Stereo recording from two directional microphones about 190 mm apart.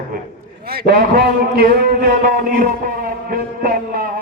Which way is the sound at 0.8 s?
60° right (ahead or behind).